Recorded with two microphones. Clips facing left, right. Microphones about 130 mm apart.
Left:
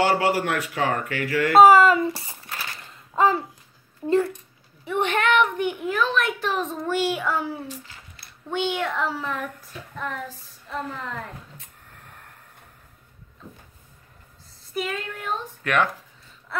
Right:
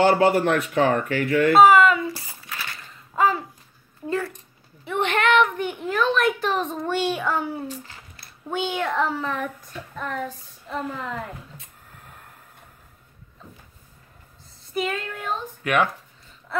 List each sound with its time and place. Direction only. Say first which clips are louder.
0.0 s a man's voice: right 4 dB; 30° right (ahead or behind)
1.5 s speech: left 2 dB; 35° left (ahead or behind)
4.8 s a woman's voice: right 1 dB; 10° left (ahead or behind)
5.9 s a child's voice: right 5 dB; centre (ahead or behind)
8.5 s child singing: even; 5° right (ahead or behind)
14.7 s a child's voice: right 2 dB; centre (ahead or behind)
15.6 s speech: right 1 dB; 10° right (ahead or behind)